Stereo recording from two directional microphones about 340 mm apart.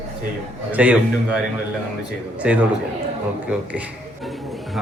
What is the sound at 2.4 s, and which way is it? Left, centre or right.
Speech, centre.